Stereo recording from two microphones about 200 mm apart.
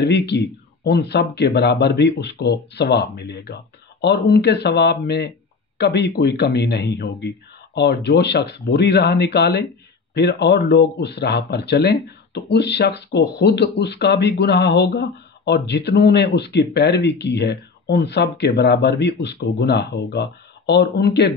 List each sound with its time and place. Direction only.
0.0 s speech: 55° left (ahead or behind)